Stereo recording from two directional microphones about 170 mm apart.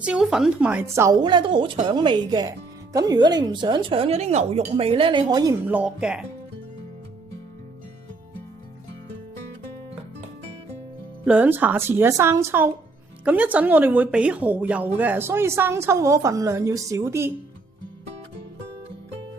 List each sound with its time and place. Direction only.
0.0 s speech: 5° right (ahead or behind); by 5.5 s 25° right (ahead or behind)
5.6 s speech: 10° right (ahead or behind)
11.3 s a woman's voice: 10° right (ahead or behind)